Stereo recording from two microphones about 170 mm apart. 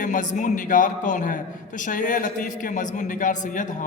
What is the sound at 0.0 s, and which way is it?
A man's voice, 50° left (ahead or behind).